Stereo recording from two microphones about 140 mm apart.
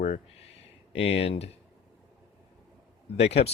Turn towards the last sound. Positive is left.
turn(degrees=50)  # may be behind; listen again after turning